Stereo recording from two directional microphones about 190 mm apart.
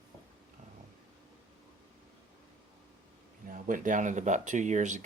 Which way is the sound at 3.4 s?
45° right (ahead or behind).